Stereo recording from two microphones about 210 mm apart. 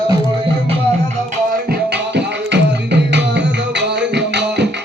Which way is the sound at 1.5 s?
50° right (ahead or behind).